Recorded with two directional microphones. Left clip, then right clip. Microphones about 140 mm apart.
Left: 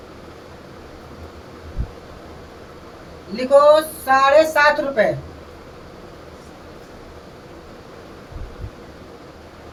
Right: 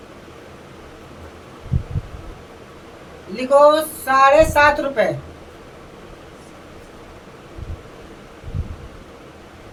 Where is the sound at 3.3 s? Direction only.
25° right (ahead or behind).